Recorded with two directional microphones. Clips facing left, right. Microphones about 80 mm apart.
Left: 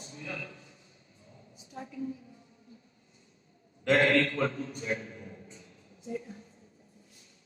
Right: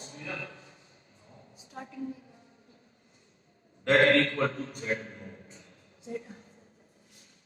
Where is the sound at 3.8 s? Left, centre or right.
Right.